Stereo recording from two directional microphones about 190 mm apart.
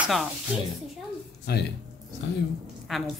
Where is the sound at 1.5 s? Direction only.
60° left (ahead or behind).